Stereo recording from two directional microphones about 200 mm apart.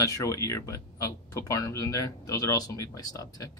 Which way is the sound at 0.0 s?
15° left (ahead or behind).